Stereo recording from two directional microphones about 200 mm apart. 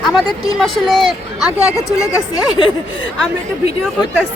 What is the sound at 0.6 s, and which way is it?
Speech, centre (ahead or behind).